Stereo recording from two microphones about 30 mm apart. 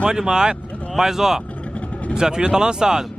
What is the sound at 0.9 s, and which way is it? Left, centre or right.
Speech, centre.